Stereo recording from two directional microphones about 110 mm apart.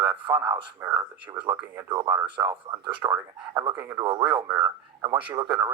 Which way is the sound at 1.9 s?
35° right (ahead or behind).